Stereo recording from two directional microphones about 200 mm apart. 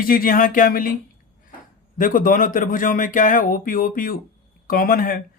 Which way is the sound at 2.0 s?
45° left (ahead or behind).